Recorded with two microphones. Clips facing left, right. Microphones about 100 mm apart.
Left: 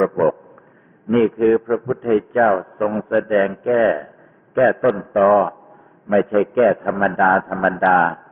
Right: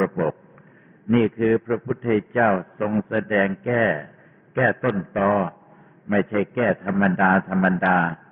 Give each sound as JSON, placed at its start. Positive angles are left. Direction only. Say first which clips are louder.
{"t": 1.0, "sound": "a man's voice", "louder": "left 4 dB", "side_deg": 35}
{"t": 2.6, "sound": "a man's voice", "louder": "left 3 dB", "side_deg": 35}
{"t": 7.2, "sound": "a man's voice", "louder": "left 5 dB", "side_deg": 25}